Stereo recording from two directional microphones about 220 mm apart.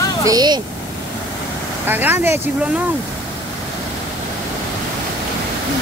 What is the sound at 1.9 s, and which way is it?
Speech, 10° right (ahead or behind).